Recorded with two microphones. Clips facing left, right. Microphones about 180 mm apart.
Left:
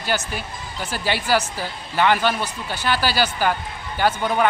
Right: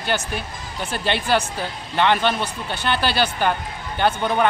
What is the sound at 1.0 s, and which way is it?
A man's voice, 10° left (ahead or behind).